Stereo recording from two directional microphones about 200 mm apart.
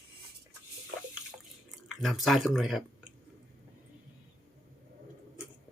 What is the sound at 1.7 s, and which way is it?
Speech, centre (ahead or behind).